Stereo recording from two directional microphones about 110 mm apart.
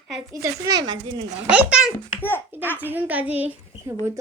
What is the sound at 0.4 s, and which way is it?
Speech, 30° right (ahead or behind).